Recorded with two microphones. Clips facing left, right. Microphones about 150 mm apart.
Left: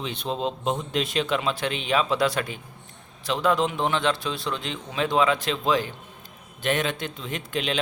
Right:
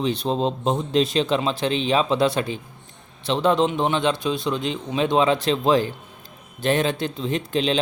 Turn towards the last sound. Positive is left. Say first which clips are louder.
# right 6 dB
turn(degrees=-30)  # may be behind; listen again after turning